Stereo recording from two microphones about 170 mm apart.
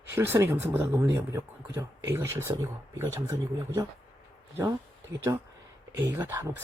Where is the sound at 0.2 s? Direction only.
15° right (ahead or behind).